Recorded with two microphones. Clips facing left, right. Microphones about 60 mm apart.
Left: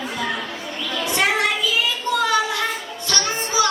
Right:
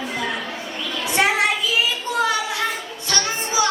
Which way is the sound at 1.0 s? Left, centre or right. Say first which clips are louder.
Right 1 dB; right.